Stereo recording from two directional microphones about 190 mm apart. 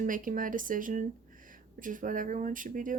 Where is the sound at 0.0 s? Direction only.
45° right (ahead or behind).